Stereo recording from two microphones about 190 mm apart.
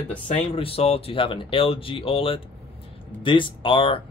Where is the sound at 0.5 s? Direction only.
30° left (ahead or behind).